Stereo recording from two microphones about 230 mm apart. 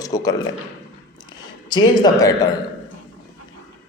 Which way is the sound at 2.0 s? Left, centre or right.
Centre.